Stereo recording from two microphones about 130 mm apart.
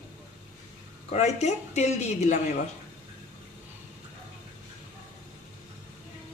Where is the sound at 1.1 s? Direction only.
60° left (ahead or behind).